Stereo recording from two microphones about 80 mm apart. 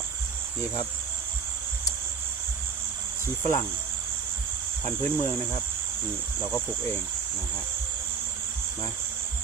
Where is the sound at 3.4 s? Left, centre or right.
Left.